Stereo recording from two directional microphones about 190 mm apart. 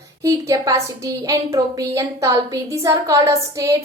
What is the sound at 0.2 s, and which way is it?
A woman's voice, 15° right (ahead or behind).